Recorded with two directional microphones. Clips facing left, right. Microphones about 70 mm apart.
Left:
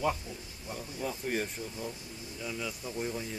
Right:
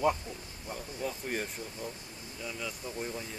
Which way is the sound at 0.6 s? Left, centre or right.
Centre.